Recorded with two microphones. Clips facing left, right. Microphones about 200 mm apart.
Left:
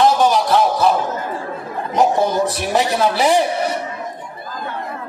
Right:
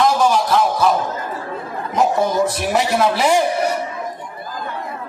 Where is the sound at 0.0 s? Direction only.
30° left (ahead or behind).